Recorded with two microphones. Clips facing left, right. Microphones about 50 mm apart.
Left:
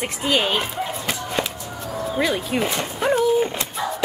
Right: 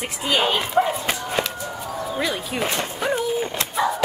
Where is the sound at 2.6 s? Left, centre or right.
Centre.